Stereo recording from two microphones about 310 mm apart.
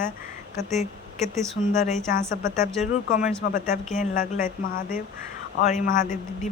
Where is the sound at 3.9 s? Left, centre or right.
Left.